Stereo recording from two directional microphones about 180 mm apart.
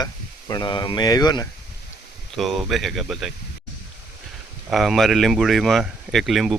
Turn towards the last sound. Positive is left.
turn(degrees=0)  # may be behind; listen again after turning